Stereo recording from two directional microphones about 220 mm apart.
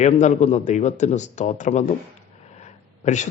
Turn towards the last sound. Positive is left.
turn(degrees=30)  # may be behind; listen again after turning